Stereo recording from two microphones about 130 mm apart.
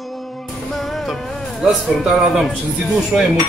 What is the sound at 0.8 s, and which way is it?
A man's voice, centre (ahead or behind).